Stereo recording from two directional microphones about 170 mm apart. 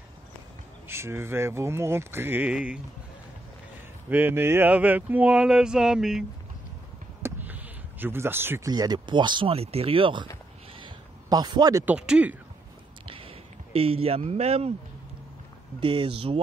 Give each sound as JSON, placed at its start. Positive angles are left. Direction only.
{"t": 0.8, "sound": "speech", "side_deg": -15}
{"t": 4.1, "sound": "speech", "side_deg": -10}
{"t": 7.2, "sound": "speech", "side_deg": -10}
{"t": 10.8, "sound": "a sound", "side_deg": -25}
{"t": 11.8, "sound": "speech", "side_deg": -10}
{"t": 13.0, "sound": "a sound", "side_deg": -30}
{"t": 13.7, "sound": "speech", "side_deg": -35}
{"t": 15.8, "sound": "speech", "side_deg": -30}